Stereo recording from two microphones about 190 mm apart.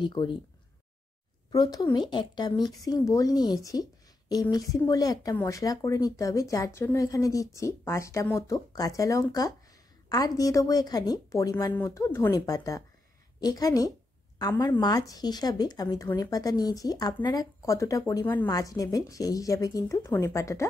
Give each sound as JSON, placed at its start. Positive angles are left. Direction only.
{"t": 0.0, "sound": "speech", "side_deg": 25}
{"t": 1.5, "sound": "speech", "side_deg": 20}